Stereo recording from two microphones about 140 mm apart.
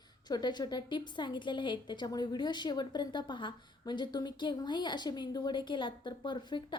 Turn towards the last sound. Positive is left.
turn(degrees=35)  # may be behind; listen again after turning